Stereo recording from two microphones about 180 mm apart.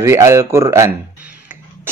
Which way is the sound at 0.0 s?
15° right (ahead or behind).